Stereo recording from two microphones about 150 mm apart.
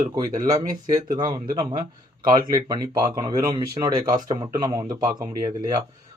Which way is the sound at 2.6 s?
25° right (ahead or behind).